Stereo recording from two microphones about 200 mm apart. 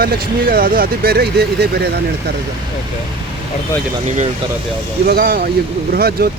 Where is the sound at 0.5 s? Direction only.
45° right (ahead or behind).